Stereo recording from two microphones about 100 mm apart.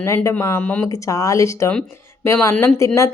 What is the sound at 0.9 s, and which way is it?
A woman's voice, 35° left (ahead or behind).